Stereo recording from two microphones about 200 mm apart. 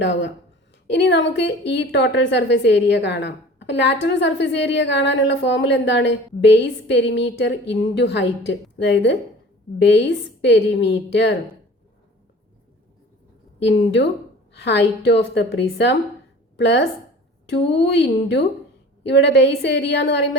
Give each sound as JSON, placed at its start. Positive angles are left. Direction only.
{"t": 0.0, "sound": "a woman's voice", "side_deg": 60}
{"t": 13.6, "sound": "a woman's voice", "side_deg": 60}